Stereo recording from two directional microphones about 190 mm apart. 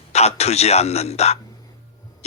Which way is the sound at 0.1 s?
35° left (ahead or behind).